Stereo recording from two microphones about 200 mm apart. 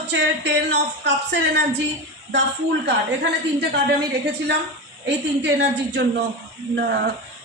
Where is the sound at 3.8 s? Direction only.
55° right (ahead or behind).